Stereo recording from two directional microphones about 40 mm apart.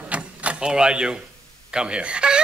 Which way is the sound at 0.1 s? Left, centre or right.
Right.